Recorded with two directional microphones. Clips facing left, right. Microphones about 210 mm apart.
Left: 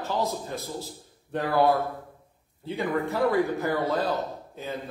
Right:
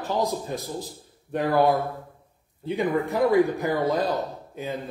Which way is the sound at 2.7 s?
15° right (ahead or behind).